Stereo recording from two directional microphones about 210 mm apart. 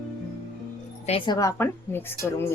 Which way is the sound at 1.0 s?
25° left (ahead or behind).